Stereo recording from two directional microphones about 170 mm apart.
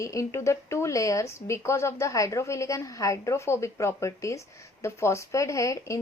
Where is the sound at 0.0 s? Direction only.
20° left (ahead or behind).